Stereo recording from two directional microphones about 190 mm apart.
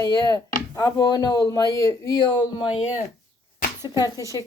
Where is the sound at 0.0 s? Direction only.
20° left (ahead or behind).